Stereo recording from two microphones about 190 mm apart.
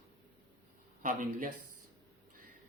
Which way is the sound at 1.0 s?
45° right (ahead or behind).